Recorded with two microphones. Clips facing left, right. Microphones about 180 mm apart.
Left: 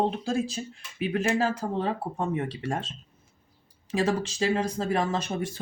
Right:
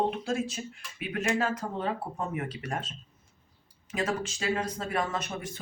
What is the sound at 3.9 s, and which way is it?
Speech, 30° left (ahead or behind).